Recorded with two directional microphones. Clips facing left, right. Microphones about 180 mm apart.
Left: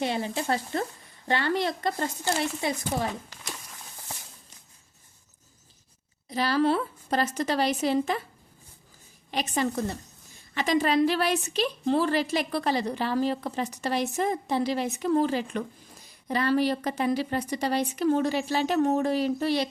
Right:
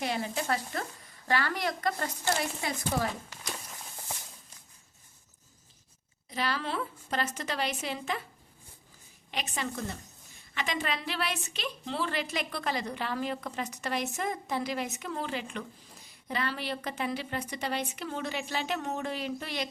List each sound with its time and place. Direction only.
0.0 s speech: 25° left (ahead or behind)
6.2 s a woman's voice: 35° left (ahead or behind)
9.3 s a woman's voice: 40° left (ahead or behind)